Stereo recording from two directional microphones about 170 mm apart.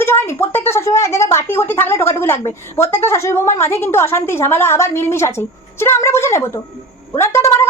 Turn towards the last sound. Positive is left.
turn(degrees=15)  # may be behind; listen again after turning